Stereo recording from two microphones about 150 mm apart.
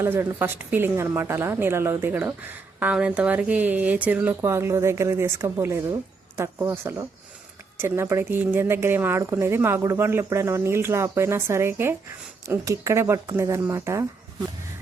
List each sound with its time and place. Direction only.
0.0 s a woman's voice: 15° right (ahead or behind)